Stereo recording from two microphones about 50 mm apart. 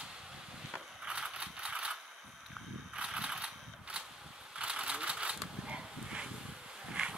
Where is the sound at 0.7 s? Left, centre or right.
Centre.